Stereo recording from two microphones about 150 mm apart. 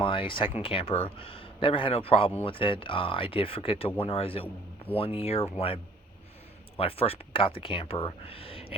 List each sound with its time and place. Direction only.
0.0 s speech: 35° left (ahead or behind)